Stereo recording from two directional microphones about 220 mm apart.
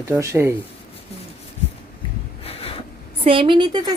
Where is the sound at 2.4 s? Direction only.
25° left (ahead or behind).